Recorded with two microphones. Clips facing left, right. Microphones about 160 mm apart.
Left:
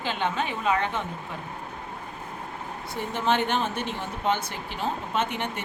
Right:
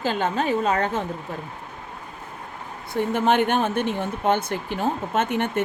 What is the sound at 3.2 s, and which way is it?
Speech, 50° right (ahead or behind).